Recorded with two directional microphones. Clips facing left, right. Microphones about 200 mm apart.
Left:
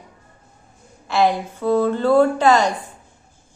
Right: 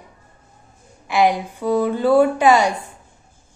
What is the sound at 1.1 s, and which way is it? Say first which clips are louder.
A woman's voice: right 1 dB; 15° right (ahead or behind).